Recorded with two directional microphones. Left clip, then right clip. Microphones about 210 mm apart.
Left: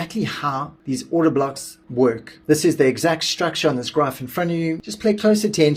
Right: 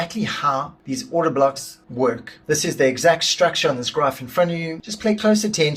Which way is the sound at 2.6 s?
45° left (ahead or behind).